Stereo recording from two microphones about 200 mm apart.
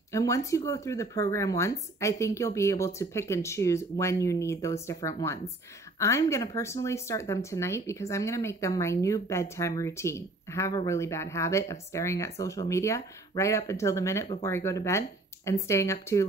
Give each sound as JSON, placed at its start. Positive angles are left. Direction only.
{"t": 0.1, "sound": "speech", "side_deg": 15}